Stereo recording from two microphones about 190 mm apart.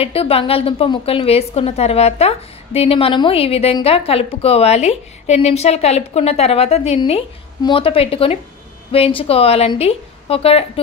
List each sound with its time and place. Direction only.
0.0 s a woman's voice: 30° left (ahead or behind)